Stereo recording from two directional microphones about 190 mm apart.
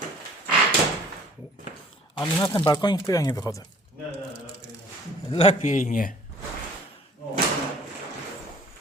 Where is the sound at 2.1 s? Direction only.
15° left (ahead or behind).